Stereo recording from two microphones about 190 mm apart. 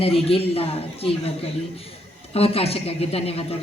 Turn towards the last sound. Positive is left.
turn(degrees=30)  # may be behind; listen again after turning